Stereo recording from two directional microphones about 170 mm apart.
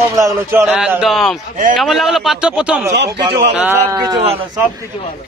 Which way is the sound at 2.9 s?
90° right.